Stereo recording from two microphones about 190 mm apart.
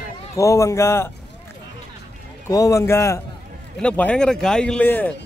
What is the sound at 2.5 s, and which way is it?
Speech, 15° left (ahead or behind).